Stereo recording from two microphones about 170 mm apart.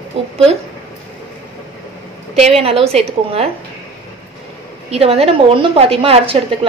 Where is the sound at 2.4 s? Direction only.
40° right (ahead or behind).